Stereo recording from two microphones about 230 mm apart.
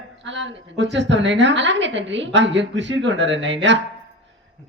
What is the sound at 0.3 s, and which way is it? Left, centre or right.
A woman's voice, right.